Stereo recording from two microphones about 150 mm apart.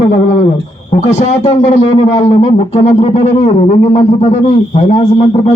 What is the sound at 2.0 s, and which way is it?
Speech, 40° left (ahead or behind).